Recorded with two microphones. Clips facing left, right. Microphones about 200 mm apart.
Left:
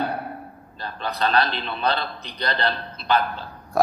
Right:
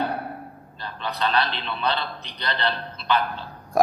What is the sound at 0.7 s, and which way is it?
A man's voice, 40° left (ahead or behind).